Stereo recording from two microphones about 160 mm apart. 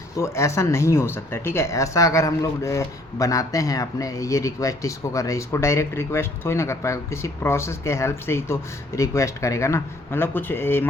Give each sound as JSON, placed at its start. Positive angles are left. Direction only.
{"t": 0.2, "sound": "speech", "side_deg": 15}